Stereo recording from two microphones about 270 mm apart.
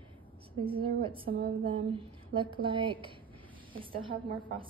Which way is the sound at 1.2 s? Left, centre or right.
Right.